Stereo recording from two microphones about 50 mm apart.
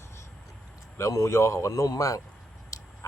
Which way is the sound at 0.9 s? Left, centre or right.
Left.